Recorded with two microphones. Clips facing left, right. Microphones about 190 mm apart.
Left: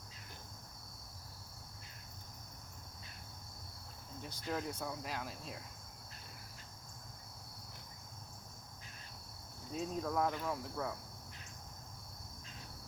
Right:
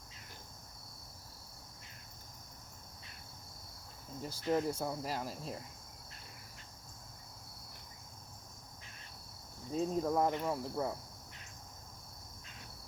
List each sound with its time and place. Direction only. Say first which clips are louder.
4.3 s speech: right 7 dB; 30° right (ahead or behind)
9.7 s cricket: right 5 dB; 30° right (ahead or behind)